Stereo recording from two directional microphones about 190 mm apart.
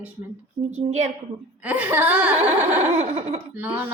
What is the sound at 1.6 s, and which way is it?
Speech, 10° right (ahead or behind).